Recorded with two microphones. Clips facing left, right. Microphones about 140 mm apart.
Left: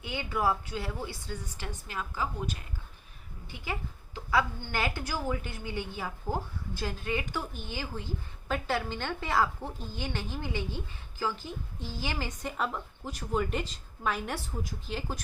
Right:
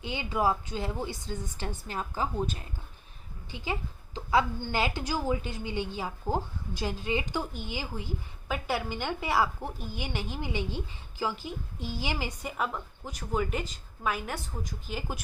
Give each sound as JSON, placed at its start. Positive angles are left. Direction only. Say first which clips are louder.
{"t": 0.0, "sound": "a woman's voice", "louder": "right 2 dB", "side_deg": -20}
{"t": 1.6, "sound": "a woman's voice", "louder": "right 3 dB", "side_deg": -35}